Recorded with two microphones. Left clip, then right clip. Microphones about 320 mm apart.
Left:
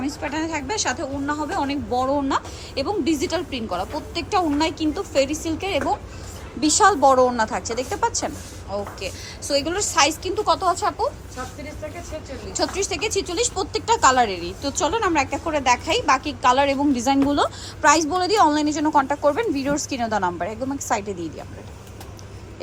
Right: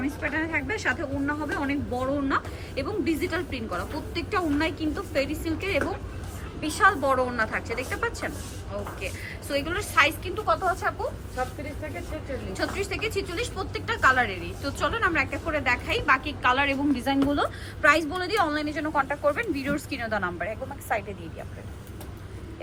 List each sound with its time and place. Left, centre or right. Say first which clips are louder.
0.0 s speech: left 2 dB; centre
12.5 s speech: left 7 dB; centre